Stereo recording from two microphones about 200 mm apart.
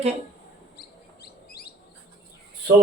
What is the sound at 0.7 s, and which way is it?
Bird, 50° left (ahead or behind).